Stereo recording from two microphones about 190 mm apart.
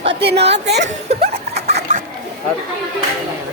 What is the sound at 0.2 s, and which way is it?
Speech, 60° right (ahead or behind).